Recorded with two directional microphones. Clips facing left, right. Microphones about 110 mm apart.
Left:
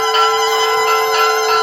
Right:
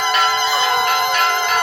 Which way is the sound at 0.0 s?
35° left (ahead or behind).